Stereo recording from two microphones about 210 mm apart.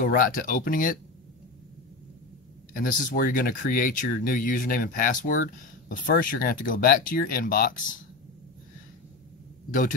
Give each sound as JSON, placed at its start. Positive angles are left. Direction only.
{"t": 0.0, "sound": "speech", "side_deg": 40}
{"t": 2.7, "sound": "speech", "side_deg": 40}
{"t": 9.7, "sound": "speech", "side_deg": 40}